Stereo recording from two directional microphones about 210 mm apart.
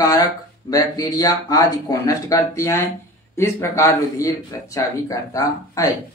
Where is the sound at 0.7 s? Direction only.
15° left (ahead or behind).